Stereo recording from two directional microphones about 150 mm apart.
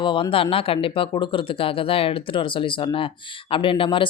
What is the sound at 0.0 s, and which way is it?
Speech, 35° left (ahead or behind).